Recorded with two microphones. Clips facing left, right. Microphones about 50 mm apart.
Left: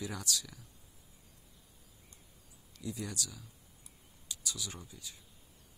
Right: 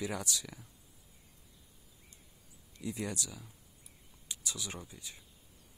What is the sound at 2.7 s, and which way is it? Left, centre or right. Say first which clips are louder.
Speech: right 2 dB; right.